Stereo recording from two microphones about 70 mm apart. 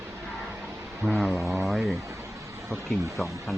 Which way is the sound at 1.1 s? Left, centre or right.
Centre.